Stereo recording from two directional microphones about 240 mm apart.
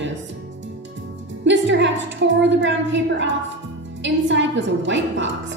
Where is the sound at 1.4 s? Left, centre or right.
Right.